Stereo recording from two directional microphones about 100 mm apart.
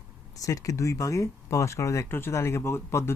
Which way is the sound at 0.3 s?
35° left (ahead or behind).